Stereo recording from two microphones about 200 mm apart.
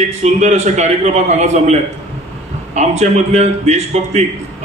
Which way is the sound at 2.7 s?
35° right (ahead or behind).